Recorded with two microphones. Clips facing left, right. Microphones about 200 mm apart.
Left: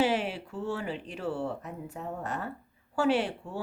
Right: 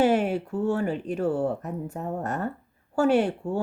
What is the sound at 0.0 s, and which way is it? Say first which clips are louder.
Speech: right 6 dB; 50° right (ahead or behind).